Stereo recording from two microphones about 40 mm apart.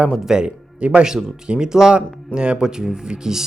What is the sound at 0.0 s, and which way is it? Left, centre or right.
Speech, centre.